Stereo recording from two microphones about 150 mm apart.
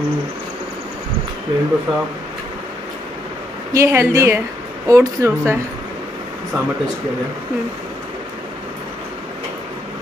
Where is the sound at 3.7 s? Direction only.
20° right (ahead or behind).